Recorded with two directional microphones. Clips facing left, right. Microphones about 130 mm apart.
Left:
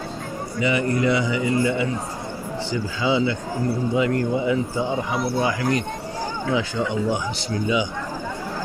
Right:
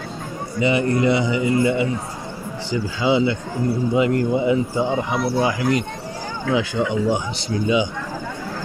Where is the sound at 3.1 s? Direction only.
20° right (ahead or behind).